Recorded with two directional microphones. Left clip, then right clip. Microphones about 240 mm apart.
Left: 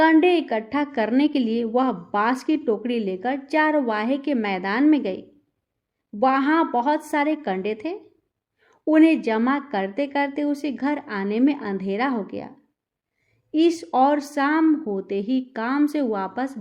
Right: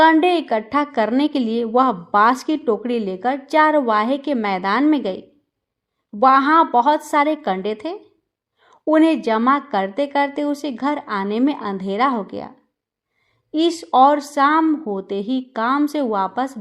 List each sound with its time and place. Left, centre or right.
0.0 s a woman's voice: centre
13.6 s a woman's voice: centre